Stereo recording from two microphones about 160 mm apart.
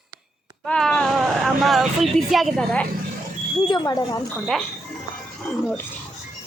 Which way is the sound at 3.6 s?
30° left (ahead or behind).